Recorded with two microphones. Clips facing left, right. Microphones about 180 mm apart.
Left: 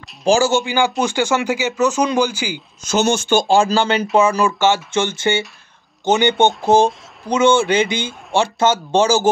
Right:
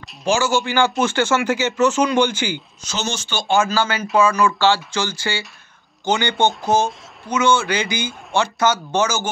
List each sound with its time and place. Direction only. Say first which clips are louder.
0.2 s a man's voice: left 5 dB; 35° left (ahead or behind)
0.5 s speech: left 1 dB; 20° left (ahead or behind)
2.8 s speech: left 12 dB; 50° left (ahead or behind)
3.4 s speech: right 1 dB; 30° left (ahead or behind)